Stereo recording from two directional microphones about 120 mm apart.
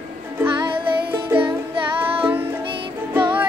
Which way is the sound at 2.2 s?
20° right (ahead or behind).